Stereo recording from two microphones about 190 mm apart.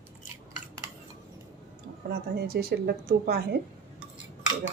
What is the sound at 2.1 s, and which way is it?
A woman's voice, 55° right (ahead or behind).